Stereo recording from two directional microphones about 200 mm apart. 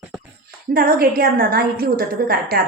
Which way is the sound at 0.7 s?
50° right (ahead or behind).